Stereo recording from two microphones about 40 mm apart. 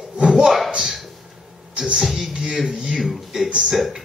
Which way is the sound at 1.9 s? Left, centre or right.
Centre.